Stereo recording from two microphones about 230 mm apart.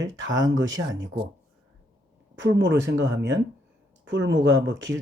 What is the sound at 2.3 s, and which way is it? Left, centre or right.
Speech, right.